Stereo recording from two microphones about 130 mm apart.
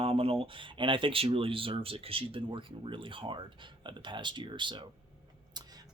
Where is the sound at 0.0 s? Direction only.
45° right (ahead or behind).